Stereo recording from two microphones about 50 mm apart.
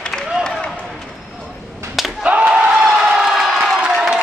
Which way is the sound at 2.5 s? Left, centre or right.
Centre.